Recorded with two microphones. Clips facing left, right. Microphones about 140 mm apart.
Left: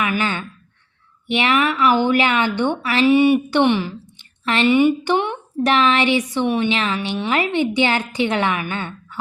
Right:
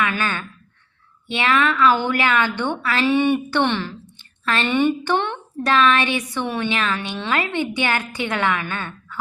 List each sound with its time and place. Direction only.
0.0 s a woman's voice: 20° left (ahead or behind)
4.7 s a woman's voice: 10° left (ahead or behind)
5.6 s a woman's voice: 20° left (ahead or behind)